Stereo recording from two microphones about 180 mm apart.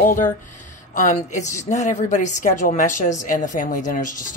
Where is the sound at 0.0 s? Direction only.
50° left (ahead or behind).